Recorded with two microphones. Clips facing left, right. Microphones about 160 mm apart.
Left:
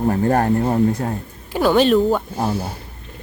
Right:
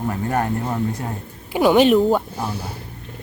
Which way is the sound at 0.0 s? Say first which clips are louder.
Left 5 dB; 40° left (ahead or behind).